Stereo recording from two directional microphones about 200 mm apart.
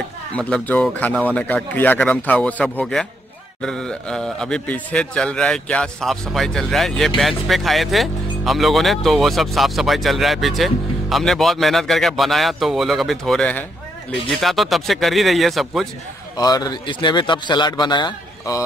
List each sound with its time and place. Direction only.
0.3 s speech: 5° left (ahead or behind)
16.3 s a man's voice: 20° left (ahead or behind)